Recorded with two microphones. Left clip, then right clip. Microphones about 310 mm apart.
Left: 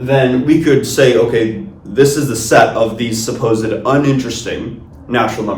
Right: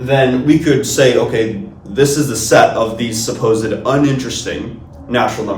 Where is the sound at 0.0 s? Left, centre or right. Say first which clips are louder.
Even; centre.